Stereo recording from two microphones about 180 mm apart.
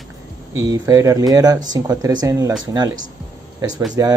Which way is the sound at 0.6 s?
20° right (ahead or behind).